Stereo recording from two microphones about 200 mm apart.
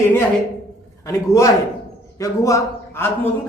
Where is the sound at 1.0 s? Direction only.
15° left (ahead or behind).